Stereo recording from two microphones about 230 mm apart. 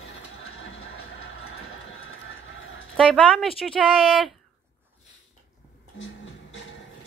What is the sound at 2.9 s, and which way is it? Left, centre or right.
Speech, centre.